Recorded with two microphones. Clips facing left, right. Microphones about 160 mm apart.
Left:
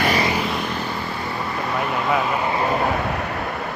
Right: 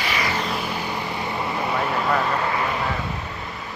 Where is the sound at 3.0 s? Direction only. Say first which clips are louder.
Left 6 dB; 70° left (ahead or behind).